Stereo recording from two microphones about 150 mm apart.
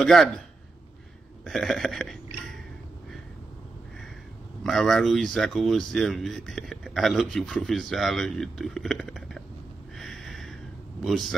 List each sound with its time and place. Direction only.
0.0 s speech: 5° left (ahead or behind)
1.4 s speech: centre (ahead or behind)
4.6 s speech: centre (ahead or behind)
9.9 s a sound: centre (ahead or behind)
11.1 s speech: centre (ahead or behind)